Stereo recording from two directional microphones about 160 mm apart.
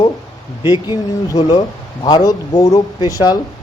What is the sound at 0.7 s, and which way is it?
Speech, 25° left (ahead or behind).